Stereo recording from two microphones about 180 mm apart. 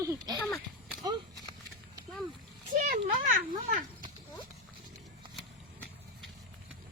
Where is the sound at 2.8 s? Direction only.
50° right (ahead or behind).